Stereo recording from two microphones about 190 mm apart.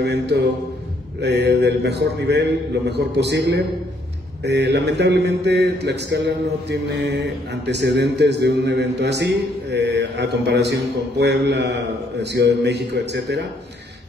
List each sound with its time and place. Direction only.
0.0 s speech: 60° right (ahead or behind)